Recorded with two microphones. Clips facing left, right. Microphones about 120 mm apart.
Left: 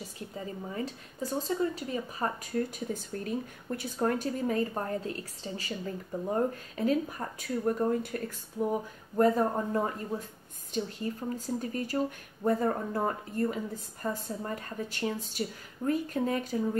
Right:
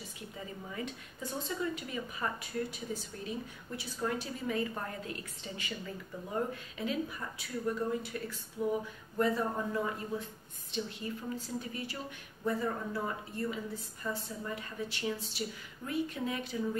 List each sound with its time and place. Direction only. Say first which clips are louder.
0.7 s a woman's voice: left 4 dB; 35° left (ahead or behind)